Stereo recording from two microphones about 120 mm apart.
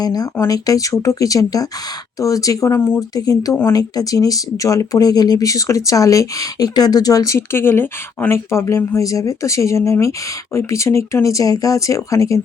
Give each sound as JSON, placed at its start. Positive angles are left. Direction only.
{"t": 0.0, "sound": "speech", "side_deg": 30}